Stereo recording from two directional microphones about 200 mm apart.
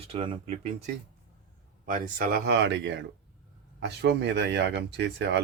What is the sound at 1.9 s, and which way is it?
Speech, 45° right (ahead or behind).